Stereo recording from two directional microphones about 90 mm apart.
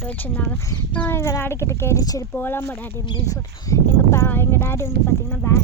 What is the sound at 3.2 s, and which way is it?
Speech, 35° left (ahead or behind).